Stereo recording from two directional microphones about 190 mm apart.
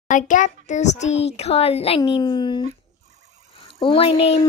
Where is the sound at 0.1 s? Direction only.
40° left (ahead or behind); by 2.6 s 25° left (ahead or behind).